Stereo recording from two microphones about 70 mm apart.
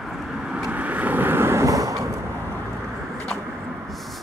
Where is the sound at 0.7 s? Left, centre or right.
Right.